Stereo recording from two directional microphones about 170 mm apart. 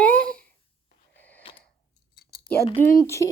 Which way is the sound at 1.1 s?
10° left (ahead or behind).